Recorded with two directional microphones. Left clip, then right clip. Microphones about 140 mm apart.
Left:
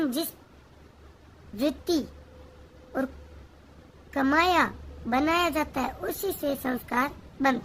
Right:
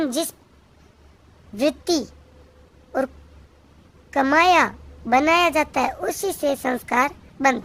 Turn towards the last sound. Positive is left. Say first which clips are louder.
# right 6 dB
turn(degrees=-45)  # may be behind; listen again after turning